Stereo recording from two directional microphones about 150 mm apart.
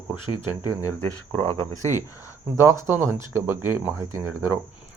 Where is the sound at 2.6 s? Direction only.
15° right (ahead or behind).